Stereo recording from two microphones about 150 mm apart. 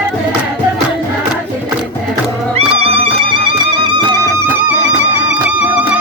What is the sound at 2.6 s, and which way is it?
Music, 40° right (ahead or behind).